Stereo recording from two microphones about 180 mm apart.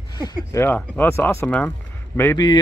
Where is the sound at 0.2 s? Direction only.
20° left (ahead or behind).